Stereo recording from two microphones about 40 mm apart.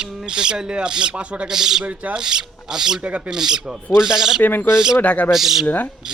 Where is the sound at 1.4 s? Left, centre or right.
Centre.